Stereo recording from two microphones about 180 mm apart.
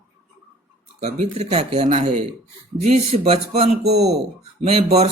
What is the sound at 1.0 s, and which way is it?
Speech, 40° right (ahead or behind).